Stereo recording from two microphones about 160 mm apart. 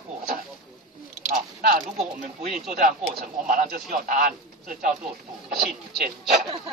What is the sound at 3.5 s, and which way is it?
Speech, 60° right (ahead or behind).